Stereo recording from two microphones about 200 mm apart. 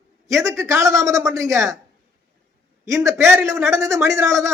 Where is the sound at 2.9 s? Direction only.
15° right (ahead or behind).